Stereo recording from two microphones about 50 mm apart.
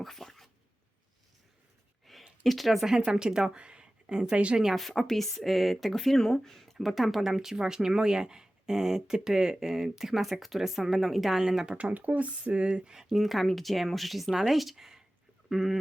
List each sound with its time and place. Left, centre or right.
0.0 s dog: centre
2.1 s a sound: centre
2.4 s speech: centre
3.1 s a woman's voice: centre
4.6 s speech: centre
11.8 s speech: right
12.6 s speech: centre